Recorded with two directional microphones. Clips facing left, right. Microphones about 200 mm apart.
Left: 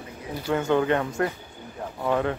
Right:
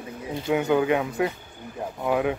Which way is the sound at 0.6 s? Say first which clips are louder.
Left 1 dB; 5° right (ahead or behind).